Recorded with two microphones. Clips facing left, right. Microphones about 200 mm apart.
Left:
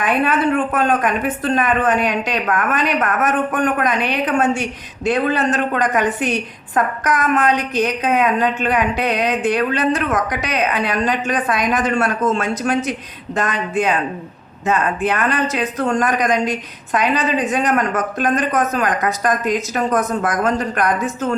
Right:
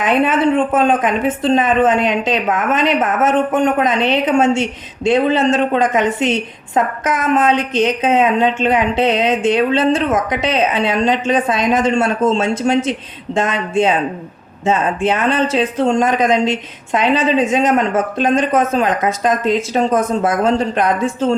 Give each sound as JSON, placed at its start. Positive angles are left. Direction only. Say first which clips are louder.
{"t": 0.0, "sound": "speech", "louder": "right 3 dB", "side_deg": -25}